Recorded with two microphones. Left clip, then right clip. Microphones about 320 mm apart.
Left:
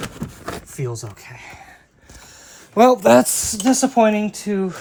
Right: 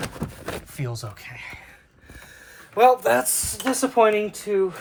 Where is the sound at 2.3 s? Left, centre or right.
Centre.